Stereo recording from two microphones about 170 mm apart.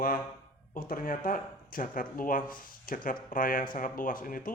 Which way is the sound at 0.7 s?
55° left (ahead or behind).